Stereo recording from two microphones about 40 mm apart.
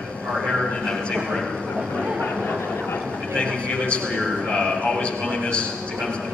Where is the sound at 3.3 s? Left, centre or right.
Left.